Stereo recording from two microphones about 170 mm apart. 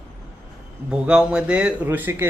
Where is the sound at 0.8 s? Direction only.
5° right (ahead or behind).